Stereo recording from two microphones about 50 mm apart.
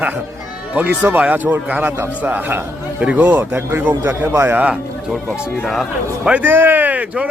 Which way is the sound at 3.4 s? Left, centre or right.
Right.